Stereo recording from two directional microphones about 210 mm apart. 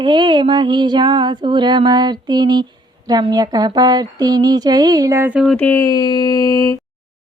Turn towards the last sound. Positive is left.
turn(degrees=15)  # may be behind; listen again after turning